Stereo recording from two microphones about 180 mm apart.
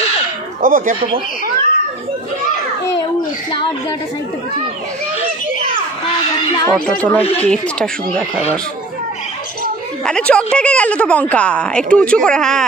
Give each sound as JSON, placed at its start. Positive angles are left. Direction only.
{"t": 0.6, "sound": "speech", "side_deg": -50}
{"t": 6.7, "sound": "a woman's voice", "side_deg": 5}
{"t": 10.0, "sound": "a woman's voice", "side_deg": 5}